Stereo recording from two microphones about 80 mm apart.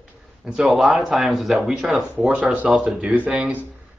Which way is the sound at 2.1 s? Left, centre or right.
Centre.